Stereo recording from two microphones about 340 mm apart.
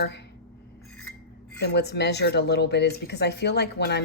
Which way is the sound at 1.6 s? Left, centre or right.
Left.